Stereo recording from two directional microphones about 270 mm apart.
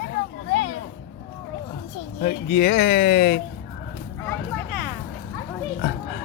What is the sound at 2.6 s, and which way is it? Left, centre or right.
Speech, left.